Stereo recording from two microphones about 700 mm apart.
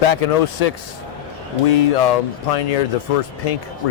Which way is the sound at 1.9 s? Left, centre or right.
Left.